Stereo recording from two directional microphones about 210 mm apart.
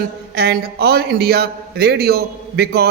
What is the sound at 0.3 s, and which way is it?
A man's voice, 50° right (ahead or behind).